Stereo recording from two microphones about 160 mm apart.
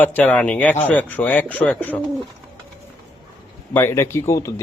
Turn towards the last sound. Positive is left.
turn(degrees=20)  # may be behind; listen again after turning